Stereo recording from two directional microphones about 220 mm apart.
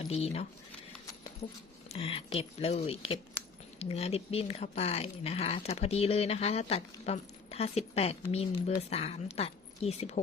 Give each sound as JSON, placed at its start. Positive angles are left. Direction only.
{"t": 0.1, "sound": "speech", "side_deg": 30}
{"t": 1.9, "sound": "speech", "side_deg": 25}